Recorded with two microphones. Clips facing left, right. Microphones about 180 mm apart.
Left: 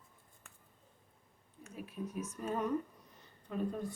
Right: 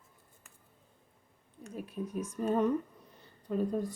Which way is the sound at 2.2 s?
30° right (ahead or behind).